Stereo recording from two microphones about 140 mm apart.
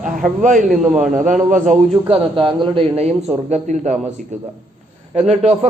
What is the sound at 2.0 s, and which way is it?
A man's voice, 40° right (ahead or behind).